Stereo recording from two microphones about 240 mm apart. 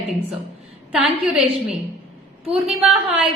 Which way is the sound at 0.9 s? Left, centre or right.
Centre.